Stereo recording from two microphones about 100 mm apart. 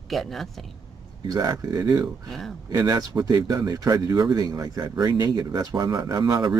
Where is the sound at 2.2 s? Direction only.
5° left (ahead or behind).